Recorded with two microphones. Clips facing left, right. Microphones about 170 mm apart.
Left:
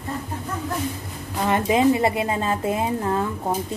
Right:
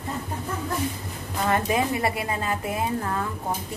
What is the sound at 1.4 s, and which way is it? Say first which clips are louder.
A woman's voice: left 5 dB; 20° left (ahead or behind).